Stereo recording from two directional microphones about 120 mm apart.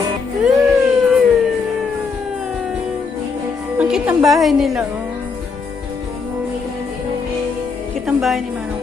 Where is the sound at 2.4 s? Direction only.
5° right (ahead or behind).